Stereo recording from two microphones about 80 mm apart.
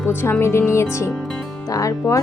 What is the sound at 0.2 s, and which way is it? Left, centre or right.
Speech, left.